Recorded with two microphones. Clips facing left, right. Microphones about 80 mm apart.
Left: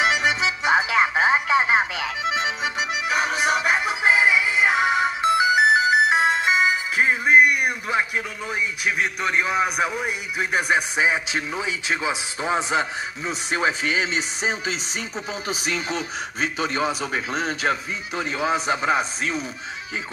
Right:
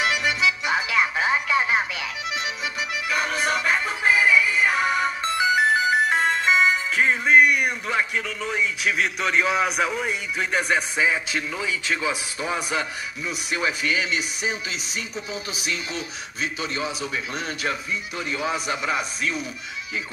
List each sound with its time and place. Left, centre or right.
0.0 s music: left; by 8.0 s centre
8.8 s a man's voice: centre; by 19.4 s left